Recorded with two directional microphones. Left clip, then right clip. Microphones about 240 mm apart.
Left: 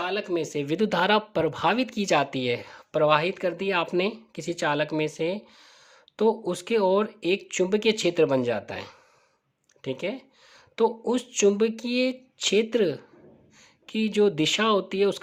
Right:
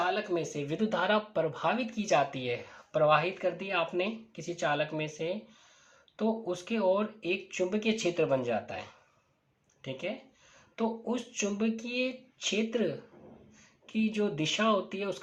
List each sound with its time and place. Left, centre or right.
0.0 s speech: left